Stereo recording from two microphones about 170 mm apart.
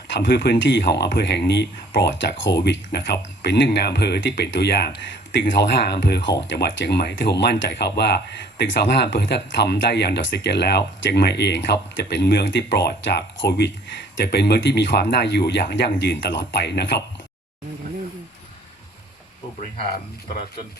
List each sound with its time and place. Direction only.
0.1 s speech: 80° left